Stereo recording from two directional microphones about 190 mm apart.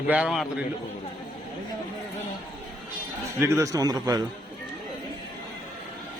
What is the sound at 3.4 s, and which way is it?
Speech, 15° right (ahead or behind).